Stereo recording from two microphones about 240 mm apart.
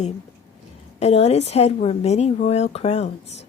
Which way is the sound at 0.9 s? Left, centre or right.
Left.